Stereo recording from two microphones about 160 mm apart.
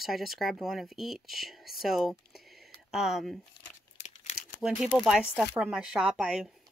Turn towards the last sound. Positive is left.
turn(degrees=-5)  # may be behind; listen again after turning